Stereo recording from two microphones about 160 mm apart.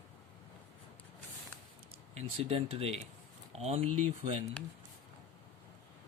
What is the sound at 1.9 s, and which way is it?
Speech, 40° right (ahead or behind).